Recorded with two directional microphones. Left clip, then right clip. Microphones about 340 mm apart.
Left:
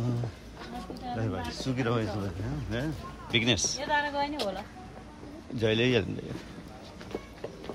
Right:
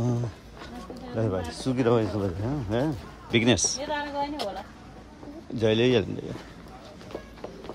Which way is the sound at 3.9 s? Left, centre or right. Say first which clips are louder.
Left 1 dB; left.